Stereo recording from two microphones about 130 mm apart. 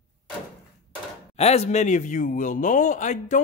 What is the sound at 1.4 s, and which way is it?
Speech, 55° left (ahead or behind).